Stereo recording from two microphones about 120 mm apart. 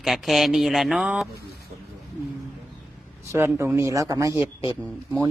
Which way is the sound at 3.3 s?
20° right (ahead or behind).